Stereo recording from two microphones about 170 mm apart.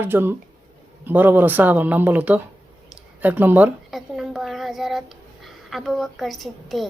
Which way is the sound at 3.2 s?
10° right (ahead or behind).